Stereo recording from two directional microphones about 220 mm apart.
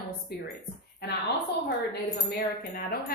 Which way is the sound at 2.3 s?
40° left (ahead or behind).